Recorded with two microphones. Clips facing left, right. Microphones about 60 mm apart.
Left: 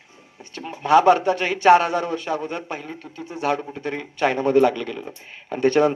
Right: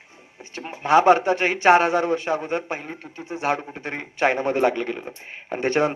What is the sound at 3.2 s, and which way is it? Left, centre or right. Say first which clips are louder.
Speech: left 1 dB; centre.